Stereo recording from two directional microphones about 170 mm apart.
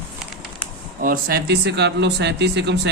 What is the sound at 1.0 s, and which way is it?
Speech, 60° right (ahead or behind).